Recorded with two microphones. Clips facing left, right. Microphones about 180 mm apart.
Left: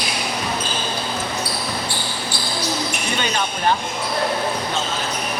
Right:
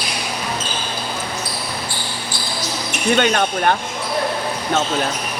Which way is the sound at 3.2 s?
60° right (ahead or behind).